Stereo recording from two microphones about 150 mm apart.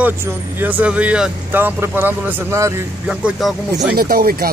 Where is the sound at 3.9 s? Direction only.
90° right.